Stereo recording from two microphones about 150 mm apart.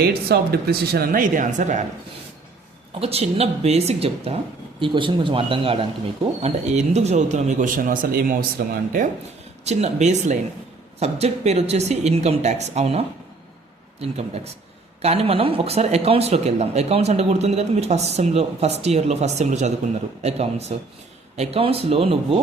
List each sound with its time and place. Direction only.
0.0 s speech: 90° right; by 1.8 s 55° right (ahead or behind)
3.0 s speech: 40° right (ahead or behind); by 9.0 s 80° right
9.6 s speech: 50° right (ahead or behind)